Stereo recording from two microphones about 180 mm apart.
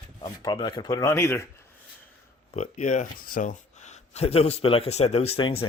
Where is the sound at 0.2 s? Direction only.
25° left (ahead or behind).